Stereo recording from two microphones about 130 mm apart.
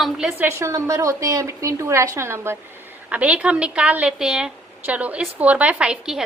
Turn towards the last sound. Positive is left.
turn(degrees=-5)  # may be behind; listen again after turning